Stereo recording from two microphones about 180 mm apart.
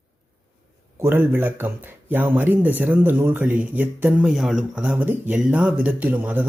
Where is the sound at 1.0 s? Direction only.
10° right (ahead or behind).